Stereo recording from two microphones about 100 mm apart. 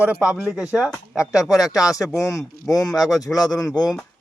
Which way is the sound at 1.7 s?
35° left (ahead or behind).